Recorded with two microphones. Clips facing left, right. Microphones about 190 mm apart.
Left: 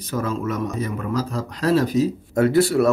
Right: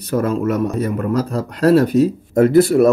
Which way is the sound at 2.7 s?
40° right (ahead or behind).